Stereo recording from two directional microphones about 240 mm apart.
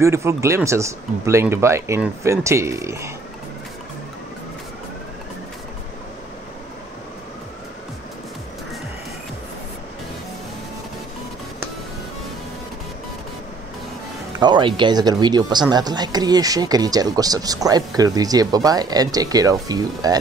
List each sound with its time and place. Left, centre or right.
0.0 s speech: centre
14.4 s speech: centre